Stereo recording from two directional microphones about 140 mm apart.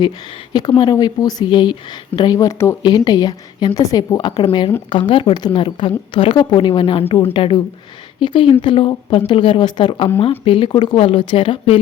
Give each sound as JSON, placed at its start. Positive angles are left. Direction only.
{"t": 0.8, "sound": "a woman's voice", "side_deg": 30}
{"t": 10.9, "sound": "a woman's voice", "side_deg": 40}